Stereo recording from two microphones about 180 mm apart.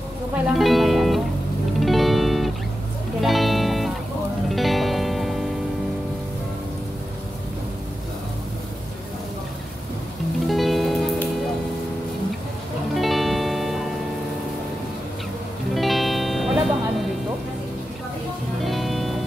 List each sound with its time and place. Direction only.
0.6 s music: centre (ahead or behind)
10.5 s music: centre (ahead or behind)
12.9 s music: centre (ahead or behind)
15.7 s music: centre (ahead or behind)
18.6 s music: centre (ahead or behind)